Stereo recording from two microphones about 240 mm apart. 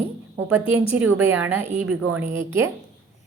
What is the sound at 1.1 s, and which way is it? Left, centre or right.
Speech, centre.